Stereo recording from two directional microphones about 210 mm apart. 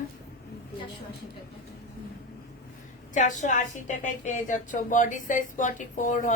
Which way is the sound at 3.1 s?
35° left (ahead or behind).